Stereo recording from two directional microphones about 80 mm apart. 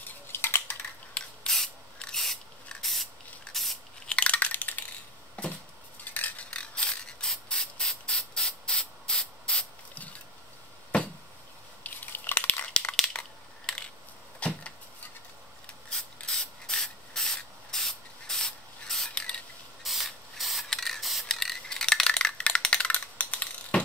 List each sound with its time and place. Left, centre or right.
0.0 s a sound: left
1.1 s a sound: centre
3.5 s spray: centre
4.1 s crushing: centre
5.4 s a sound: centre
6.0 s spray: left
11.8 s crushing: left
13.7 s coin: centre
14.4 s a sound: centre
15.9 s rub: centre
17.4 s spray: centre
19.8 s spray: centre